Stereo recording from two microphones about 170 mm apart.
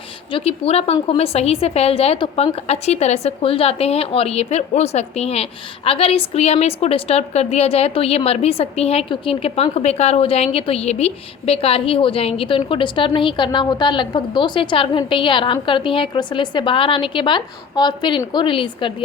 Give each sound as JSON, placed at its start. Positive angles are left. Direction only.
{"t": 0.3, "sound": "a woman's voice", "side_deg": 35}